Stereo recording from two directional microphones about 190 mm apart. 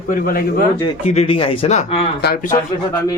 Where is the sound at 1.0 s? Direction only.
35° left (ahead or behind).